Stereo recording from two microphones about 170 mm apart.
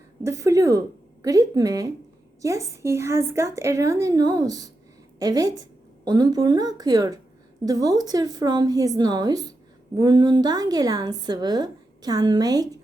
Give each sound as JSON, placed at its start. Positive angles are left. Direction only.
{"t": 0.2, "sound": "a woman's voice", "side_deg": -15}